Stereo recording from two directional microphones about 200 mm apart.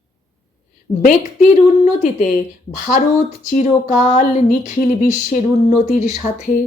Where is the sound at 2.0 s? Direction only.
40° left (ahead or behind).